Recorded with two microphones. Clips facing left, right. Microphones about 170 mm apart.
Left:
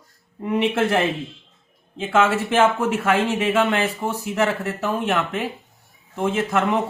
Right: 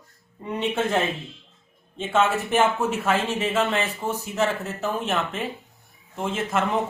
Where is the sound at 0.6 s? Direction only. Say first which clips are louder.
Left 3 dB; 90° left.